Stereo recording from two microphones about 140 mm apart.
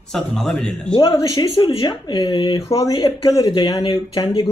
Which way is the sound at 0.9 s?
30° left (ahead or behind).